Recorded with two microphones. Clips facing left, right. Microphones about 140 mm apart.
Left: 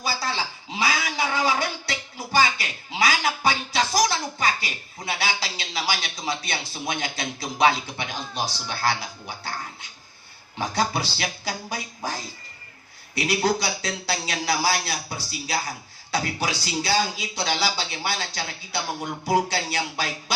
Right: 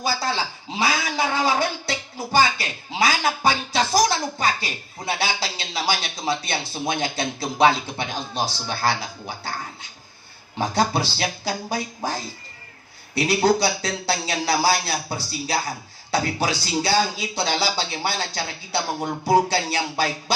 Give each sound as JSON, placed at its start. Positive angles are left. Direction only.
{"t": 0.0, "sound": "a man's voice", "side_deg": -25}
{"t": 10.6, "sound": "a man's voice", "side_deg": -25}